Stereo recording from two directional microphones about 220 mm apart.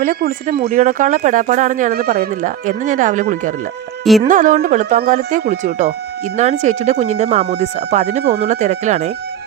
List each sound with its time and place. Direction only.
0.0 s speech: 40° right (ahead or behind)